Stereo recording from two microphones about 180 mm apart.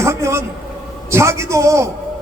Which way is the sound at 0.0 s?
15° right (ahead or behind).